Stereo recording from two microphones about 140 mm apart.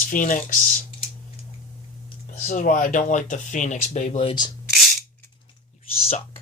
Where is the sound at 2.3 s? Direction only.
65° left (ahead or behind); by 4.3 s 50° left (ahead or behind).